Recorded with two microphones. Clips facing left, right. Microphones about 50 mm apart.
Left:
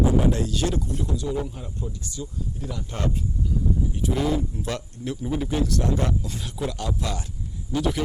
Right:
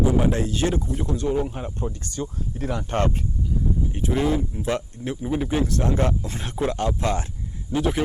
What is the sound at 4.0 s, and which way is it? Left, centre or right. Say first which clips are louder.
Speech: right 3 dB; right.